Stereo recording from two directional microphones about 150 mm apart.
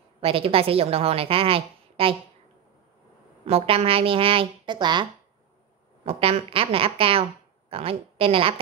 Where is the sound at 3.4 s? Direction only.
40° right (ahead or behind).